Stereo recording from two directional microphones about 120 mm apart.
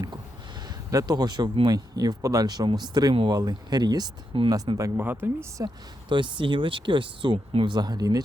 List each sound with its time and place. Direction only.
0.7 s speech: 30° right (ahead or behind)
4.9 s speech: 15° right (ahead or behind)
5.6 s speech: 40° right (ahead or behind)